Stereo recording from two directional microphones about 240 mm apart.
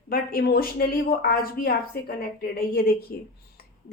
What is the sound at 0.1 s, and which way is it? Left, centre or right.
A woman's voice, left.